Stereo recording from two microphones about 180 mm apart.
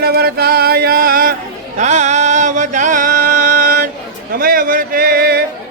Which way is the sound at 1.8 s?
40° right (ahead or behind).